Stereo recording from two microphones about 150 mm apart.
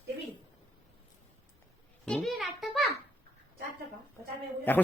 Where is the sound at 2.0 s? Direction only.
5° left (ahead or behind).